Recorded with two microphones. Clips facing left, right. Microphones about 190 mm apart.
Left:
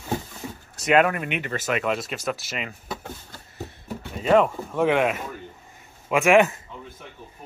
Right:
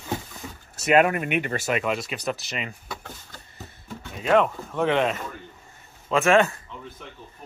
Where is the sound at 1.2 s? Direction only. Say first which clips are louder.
Right 3 dB; 45° right (ahead or behind).